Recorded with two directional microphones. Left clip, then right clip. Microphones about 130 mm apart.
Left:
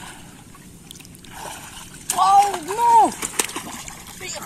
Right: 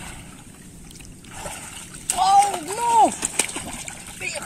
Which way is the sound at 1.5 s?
20° right (ahead or behind).